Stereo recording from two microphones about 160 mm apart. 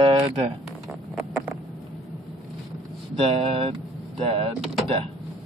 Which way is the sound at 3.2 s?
35° right (ahead or behind).